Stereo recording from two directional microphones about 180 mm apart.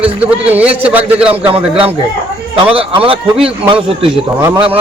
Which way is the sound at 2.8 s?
30° right (ahead or behind).